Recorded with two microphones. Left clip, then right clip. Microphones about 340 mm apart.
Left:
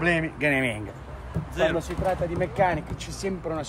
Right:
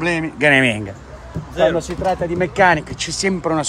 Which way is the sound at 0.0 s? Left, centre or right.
Centre.